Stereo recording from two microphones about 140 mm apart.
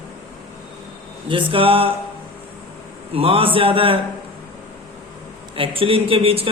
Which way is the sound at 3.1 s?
40° right (ahead or behind).